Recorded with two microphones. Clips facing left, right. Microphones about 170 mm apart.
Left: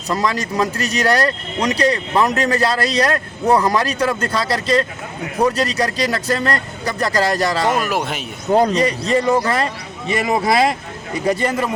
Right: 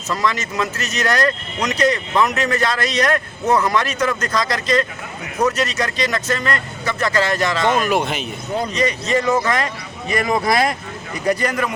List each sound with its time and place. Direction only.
0.1 s speech: 35° left (ahead or behind)
7.9 s speech: centre (ahead or behind)
8.7 s speech: 35° left (ahead or behind)